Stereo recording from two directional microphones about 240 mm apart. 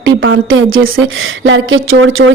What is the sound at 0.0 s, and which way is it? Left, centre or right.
A woman's voice, right.